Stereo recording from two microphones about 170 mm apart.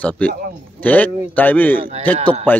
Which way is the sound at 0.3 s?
60° right (ahead or behind).